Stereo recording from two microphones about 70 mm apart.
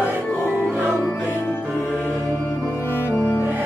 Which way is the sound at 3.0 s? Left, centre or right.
Left.